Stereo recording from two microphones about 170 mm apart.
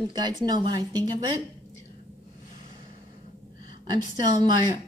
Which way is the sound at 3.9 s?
20° right (ahead or behind).